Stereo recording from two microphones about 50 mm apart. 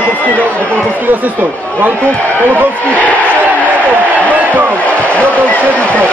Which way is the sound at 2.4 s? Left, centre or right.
Right.